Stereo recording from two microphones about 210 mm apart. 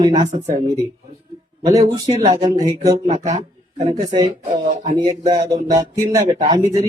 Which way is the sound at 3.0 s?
35° right (ahead or behind).